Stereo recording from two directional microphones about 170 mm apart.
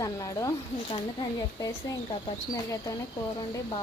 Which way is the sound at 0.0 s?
20° left (ahead or behind).